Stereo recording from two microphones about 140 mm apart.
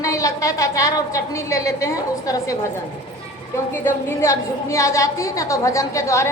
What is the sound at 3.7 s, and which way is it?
A woman's voice, 15° left (ahead or behind).